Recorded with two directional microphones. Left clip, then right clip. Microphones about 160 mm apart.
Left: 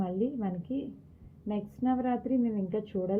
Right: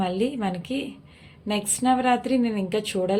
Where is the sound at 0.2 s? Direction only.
25° right (ahead or behind).